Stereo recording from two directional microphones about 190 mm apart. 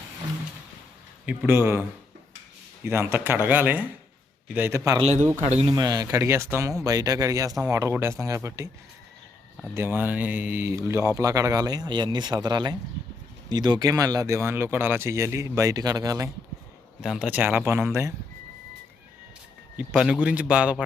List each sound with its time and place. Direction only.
1.2 s a man's voice: 5° right (ahead or behind)
2.8 s a man's voice: 10° right (ahead or behind)
4.9 s speech: 35° right (ahead or behind)
5.7 s a man's voice: 20° right (ahead or behind)
9.7 s a man's voice: 10° right (ahead or behind)
17.0 s a man's voice: 5° right (ahead or behind)
19.7 s a man's voice: 5° right (ahead or behind)